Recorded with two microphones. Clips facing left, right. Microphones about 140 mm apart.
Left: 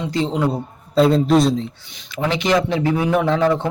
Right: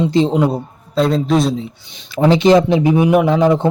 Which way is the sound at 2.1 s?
35° right (ahead or behind).